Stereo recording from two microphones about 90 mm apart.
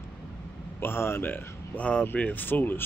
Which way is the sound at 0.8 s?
25° left (ahead or behind).